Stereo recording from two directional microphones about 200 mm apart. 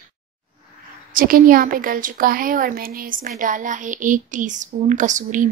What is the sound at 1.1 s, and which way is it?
A woman's voice, 45° right (ahead or behind).